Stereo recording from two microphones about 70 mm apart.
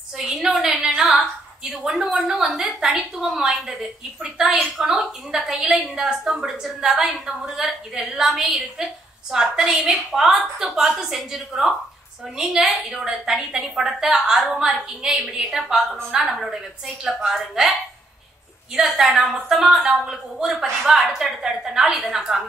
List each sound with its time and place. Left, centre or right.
0.3 s a woman's voice: centre
18.8 s a woman's voice: centre